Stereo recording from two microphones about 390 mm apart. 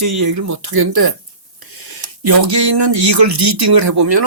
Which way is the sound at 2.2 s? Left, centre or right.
Right.